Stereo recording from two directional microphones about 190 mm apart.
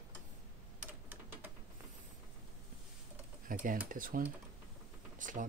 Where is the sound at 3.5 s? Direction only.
45° right (ahead or behind).